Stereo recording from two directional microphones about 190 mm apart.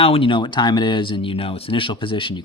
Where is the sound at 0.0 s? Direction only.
30° left (ahead or behind).